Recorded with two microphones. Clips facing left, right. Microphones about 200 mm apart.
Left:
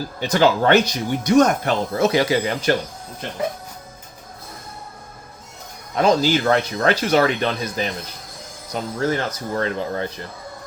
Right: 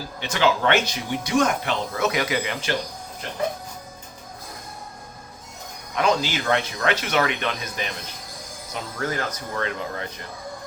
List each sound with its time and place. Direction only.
0.2 s speech: 40° left (ahead or behind)
6.0 s speech: 35° left (ahead or behind)